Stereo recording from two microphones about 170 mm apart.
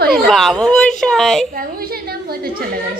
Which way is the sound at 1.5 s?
60° right (ahead or behind).